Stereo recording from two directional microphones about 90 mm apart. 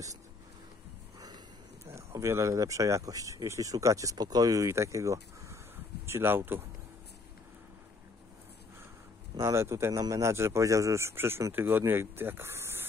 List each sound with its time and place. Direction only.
2.0 s speech: 30° right (ahead or behind)
9.4 s speech: 35° right (ahead or behind)